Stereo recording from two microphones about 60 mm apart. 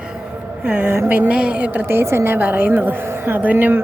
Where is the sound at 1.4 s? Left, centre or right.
Right.